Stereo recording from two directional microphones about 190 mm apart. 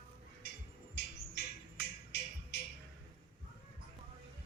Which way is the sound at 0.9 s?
65° left (ahead or behind).